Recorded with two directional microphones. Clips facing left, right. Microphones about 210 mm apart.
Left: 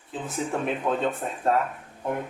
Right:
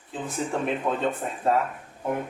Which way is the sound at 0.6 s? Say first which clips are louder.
Even; centre (ahead or behind).